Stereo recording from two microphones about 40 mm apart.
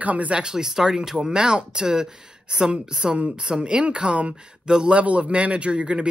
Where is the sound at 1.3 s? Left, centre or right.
Right.